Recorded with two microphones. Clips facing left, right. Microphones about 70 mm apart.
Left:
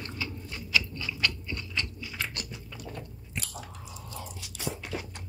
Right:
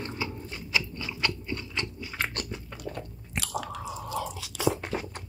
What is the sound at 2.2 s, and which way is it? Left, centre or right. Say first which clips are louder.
Biting: right 5 dB; right.